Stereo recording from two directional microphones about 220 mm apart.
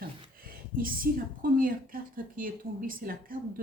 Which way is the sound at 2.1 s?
40° right (ahead or behind).